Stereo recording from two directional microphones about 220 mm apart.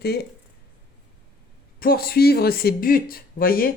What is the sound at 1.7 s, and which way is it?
Speech, 40° left (ahead or behind).